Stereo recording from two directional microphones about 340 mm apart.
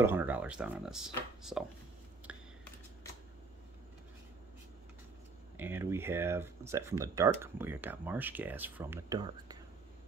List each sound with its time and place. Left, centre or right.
0.0 s speech: centre
2.3 s a sound: centre
5.6 s speech: centre